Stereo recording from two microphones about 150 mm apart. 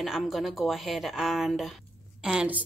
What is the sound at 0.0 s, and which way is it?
A woman's voice, centre (ahead or behind).